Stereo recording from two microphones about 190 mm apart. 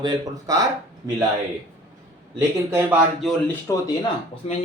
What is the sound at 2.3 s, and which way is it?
Speech, 15° right (ahead or behind).